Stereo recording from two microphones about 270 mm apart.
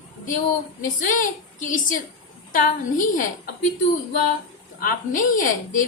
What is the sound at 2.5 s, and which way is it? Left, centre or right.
Speech, left.